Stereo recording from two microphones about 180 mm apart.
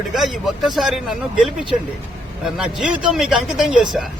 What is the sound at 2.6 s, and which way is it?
Speech, 5° right (ahead or behind).